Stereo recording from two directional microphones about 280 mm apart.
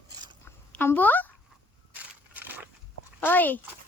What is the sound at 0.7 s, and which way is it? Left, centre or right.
Speech, centre.